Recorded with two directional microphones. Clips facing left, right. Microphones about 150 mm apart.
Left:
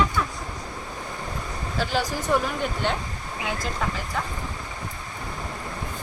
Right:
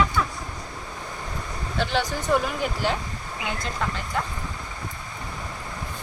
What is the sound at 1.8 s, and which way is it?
Speech, centre (ahead or behind).